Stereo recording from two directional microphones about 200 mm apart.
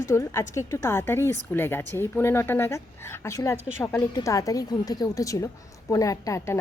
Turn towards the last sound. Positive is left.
turn(degrees=15)  # may be behind; listen again after turning